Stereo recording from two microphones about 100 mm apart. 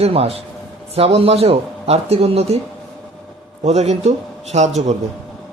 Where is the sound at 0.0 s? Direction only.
85° right.